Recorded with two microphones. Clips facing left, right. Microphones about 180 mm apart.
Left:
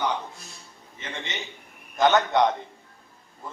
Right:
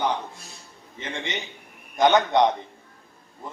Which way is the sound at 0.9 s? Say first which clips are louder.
Right 4 dB; 15° right (ahead or behind).